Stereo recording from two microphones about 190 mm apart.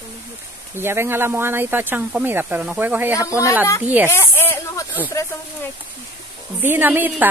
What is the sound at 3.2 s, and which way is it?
Speech, 15° left (ahead or behind).